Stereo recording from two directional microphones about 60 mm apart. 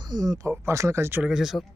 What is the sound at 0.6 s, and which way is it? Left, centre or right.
Speech, right.